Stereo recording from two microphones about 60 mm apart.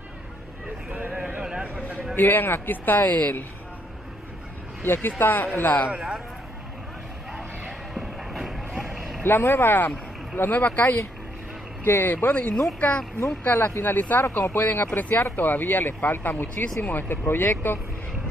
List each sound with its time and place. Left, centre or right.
1.2 s a sound: centre
2.1 s a man's voice: left
4.8 s a man's voice: left
5.9 s speech: centre
7.3 s a sound: centre
9.2 s a man's voice: left